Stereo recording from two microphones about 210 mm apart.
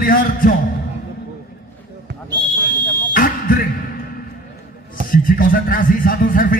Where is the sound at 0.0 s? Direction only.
40° left (ahead or behind).